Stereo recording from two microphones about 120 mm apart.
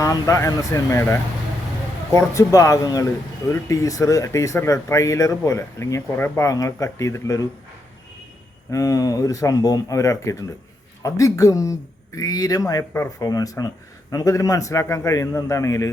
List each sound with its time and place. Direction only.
0.0 s speech: 25° left (ahead or behind)
8.7 s speech: 25° left (ahead or behind)